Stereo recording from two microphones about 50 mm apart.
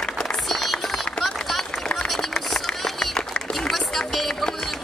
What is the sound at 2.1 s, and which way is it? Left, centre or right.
Run, centre.